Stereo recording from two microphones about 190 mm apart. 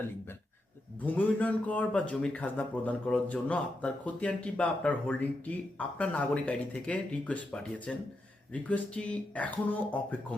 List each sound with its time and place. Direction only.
1.0 s a man's voice: 10° left (ahead or behind)